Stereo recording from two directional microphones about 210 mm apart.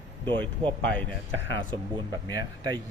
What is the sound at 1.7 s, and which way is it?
Speech, 20° right (ahead or behind).